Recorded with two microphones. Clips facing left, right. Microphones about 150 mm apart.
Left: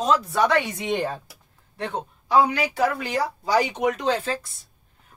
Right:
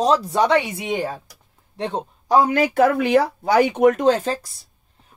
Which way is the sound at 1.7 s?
25° right (ahead or behind).